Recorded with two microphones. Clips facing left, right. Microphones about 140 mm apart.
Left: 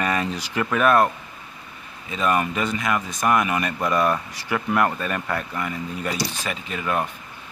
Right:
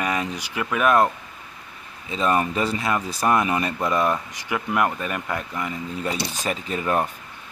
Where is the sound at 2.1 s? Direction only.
30° right (ahead or behind).